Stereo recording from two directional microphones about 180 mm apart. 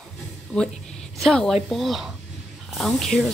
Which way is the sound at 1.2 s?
Centre (ahead or behind).